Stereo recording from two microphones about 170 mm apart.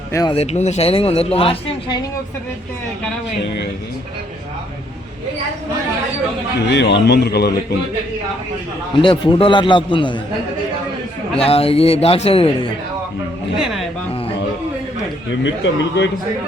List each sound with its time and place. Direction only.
0.1 s speech: 20° left (ahead or behind)
0.3 s speech: 40° left (ahead or behind)
6.7 s speech: 90° left; by 7.5 s 70° left (ahead or behind)
9.0 s a man's voice: 30° left (ahead or behind)
11.3 s speech: 35° left (ahead or behind)
13.6 s speech: centre (ahead or behind)
15.4 s a man's voice: 90° left